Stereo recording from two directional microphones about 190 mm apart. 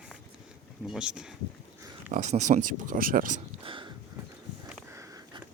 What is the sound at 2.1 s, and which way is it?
Speech, 35° right (ahead or behind).